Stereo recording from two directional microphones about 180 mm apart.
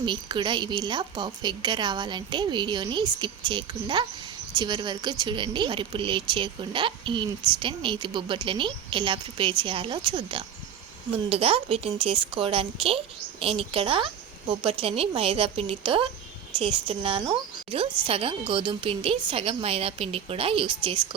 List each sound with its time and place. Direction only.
0.0 s a woman's voice: 25° right (ahead or behind)